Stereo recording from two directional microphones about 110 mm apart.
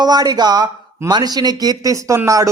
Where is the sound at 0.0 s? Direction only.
40° right (ahead or behind).